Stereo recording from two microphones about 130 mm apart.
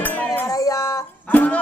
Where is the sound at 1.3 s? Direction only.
10° left (ahead or behind).